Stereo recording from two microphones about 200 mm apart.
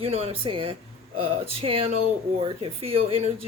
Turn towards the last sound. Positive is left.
turn(degrees=-30)  # may be behind; listen again after turning